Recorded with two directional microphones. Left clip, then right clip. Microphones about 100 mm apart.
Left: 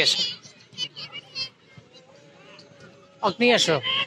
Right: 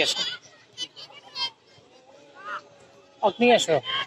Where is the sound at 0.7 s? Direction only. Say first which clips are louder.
Left 4 dB; 30° right (ahead or behind).